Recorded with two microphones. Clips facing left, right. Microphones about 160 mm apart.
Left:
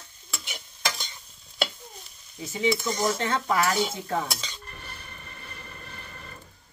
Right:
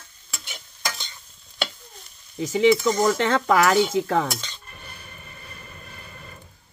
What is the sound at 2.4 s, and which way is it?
Cutlery, 90° right.